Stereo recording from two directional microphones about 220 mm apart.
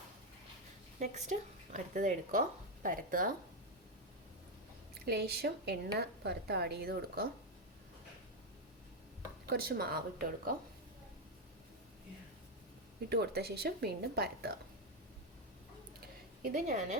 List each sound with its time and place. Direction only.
0.9 s speech: 30° right (ahead or behind)
5.0 s speech: 45° right (ahead or behind)
9.5 s speech: 45° right (ahead or behind)
13.1 s speech: 45° right (ahead or behind)
16.0 s a sound: 40° right (ahead or behind)